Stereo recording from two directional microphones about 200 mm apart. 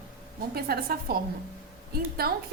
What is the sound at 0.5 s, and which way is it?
Speech, 50° right (ahead or behind).